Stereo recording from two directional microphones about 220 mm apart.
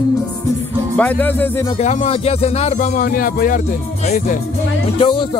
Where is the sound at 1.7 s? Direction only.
30° left (ahead or behind).